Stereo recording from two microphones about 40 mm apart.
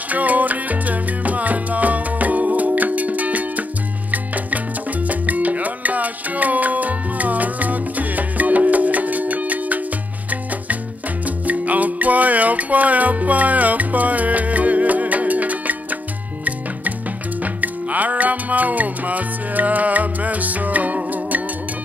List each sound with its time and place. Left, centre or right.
0.1 s salsa music: right
4.1 s music: right
11.2 s music: right
17.4 s music: right